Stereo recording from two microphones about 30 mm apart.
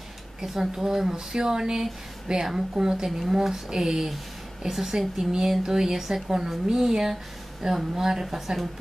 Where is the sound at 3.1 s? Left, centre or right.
Centre.